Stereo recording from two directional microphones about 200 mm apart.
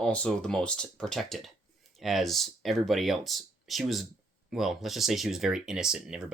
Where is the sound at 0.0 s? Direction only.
5° left (ahead or behind).